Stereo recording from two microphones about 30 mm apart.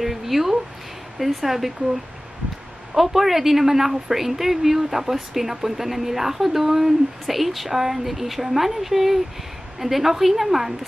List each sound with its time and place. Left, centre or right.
0.0 s a sound: centre
1.2 s a woman's voice: centre
3.1 s a woman's voice: centre